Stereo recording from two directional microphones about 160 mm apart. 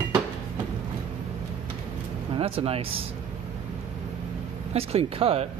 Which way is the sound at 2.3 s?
35° right (ahead or behind).